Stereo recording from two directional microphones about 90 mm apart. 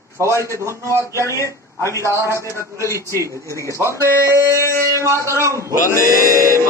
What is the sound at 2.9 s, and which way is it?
A man's voice, 35° right (ahead or behind).